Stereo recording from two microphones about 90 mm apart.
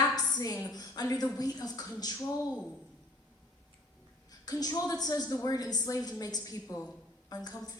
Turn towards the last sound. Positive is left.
turn(degrees=50)  # may be behind; listen again after turning